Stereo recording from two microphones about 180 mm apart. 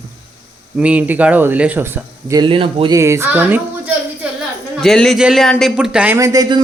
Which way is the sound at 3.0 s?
15° right (ahead or behind).